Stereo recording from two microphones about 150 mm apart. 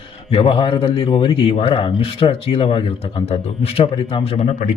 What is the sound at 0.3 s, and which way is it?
Speech, 35° left (ahead or behind).